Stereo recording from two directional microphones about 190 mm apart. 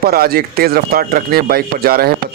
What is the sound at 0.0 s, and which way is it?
Speech, 55° right (ahead or behind).